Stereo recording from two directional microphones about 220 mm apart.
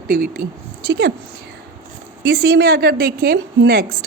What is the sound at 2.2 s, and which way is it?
A woman's voice, 45° right (ahead or behind).